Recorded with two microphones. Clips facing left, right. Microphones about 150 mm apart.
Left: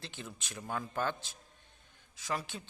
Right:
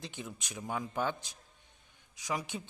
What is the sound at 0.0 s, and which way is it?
A man's voice, 15° right (ahead or behind).